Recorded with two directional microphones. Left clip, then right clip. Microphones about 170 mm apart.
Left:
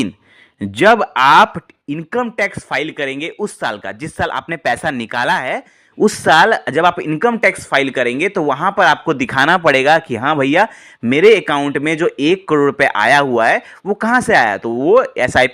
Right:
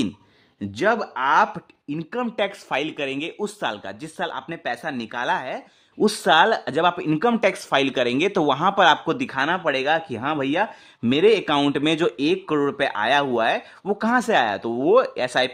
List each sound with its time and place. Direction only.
0.6 s speech: 40° left (ahead or behind)
2.3 s speech: 10° left (ahead or behind)
9.1 s speech: 30° left (ahead or behind)